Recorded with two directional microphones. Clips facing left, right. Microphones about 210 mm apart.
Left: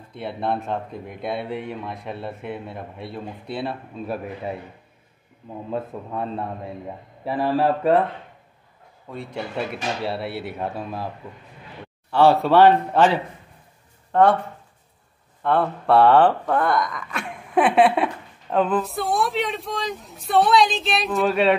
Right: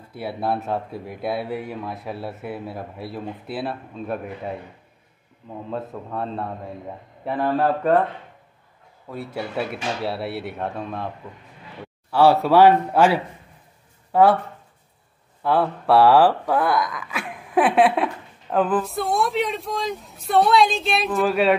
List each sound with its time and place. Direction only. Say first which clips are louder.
0.1 s speech: right 1 dB; 5° right (ahead or behind)
6.1 s speech: even; 5° left (ahead or behind)
9.1 s speech: right 1 dB; 5° right (ahead or behind)
12.1 s speech: even; 5° right (ahead or behind)
15.4 s speech: even; 5° right (ahead or behind)